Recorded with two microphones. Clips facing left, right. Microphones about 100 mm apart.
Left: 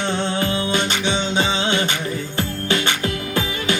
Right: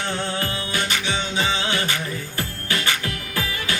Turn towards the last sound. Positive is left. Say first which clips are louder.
# left 5 dB
turn(degrees=25)  # may be behind; listen again after turning